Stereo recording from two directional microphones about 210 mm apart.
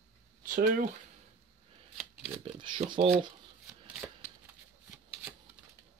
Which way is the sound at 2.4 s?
25° right (ahead or behind).